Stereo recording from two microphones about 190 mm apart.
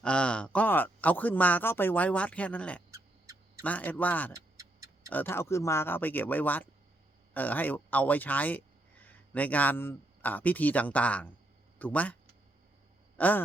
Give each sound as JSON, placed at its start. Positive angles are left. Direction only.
{"t": 0.0, "sound": "speech", "side_deg": 5}
{"t": 2.9, "sound": "owl", "side_deg": -15}
{"t": 3.6, "sound": "speech", "side_deg": 10}
{"t": 13.1, "sound": "a sound", "side_deg": 10}